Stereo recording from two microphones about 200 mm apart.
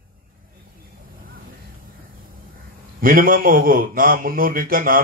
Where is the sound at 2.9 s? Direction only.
45° right (ahead or behind).